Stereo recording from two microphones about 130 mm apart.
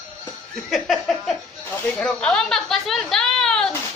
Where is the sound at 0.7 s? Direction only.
Centre (ahead or behind).